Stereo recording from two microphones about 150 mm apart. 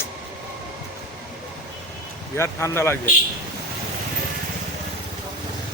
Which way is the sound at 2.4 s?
15° left (ahead or behind).